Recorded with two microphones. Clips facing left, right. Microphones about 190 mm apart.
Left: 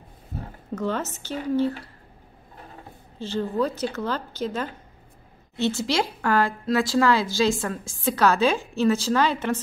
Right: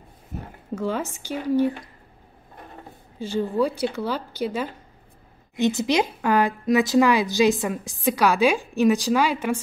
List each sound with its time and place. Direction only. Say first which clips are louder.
0.7 s a woman's voice: right 1 dB; 10° right (ahead or behind)
3.2 s a woman's voice: right 2 dB; 10° right (ahead or behind)